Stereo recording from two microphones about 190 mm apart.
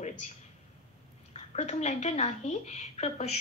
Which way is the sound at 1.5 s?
35° left (ahead or behind).